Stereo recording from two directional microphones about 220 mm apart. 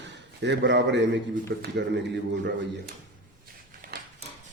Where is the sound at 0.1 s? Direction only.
50° right (ahead or behind).